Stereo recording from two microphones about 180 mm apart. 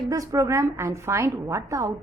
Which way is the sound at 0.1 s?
15° right (ahead or behind).